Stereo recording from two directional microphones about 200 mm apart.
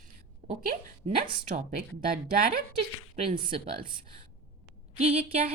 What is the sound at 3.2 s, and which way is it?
Speech, 25° right (ahead or behind).